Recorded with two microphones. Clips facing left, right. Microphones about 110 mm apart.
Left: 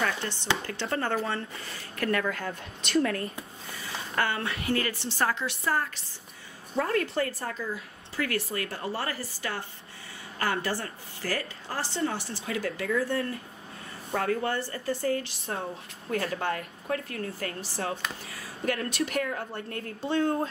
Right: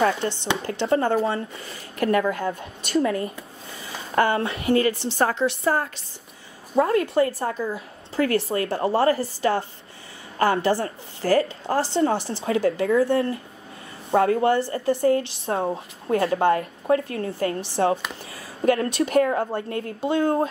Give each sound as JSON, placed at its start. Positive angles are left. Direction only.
{"t": 0.0, "sound": "a woman's voice", "side_deg": -25}
{"t": 4.1, "sound": "a woman's voice", "side_deg": -30}
{"t": 7.6, "sound": "a woman's voice", "side_deg": -30}
{"t": 15.4, "sound": "speech", "side_deg": -50}
{"t": 16.1, "sound": "a woman's voice", "side_deg": -25}
{"t": 18.7, "sound": "a woman's voice", "side_deg": -25}
{"t": 20.0, "sound": "speech", "side_deg": -15}